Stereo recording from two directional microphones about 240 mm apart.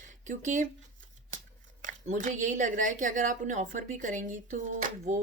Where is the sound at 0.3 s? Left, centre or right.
Right.